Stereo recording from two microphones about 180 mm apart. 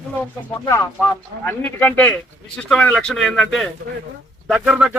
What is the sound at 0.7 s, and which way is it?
Speech, 15° left (ahead or behind).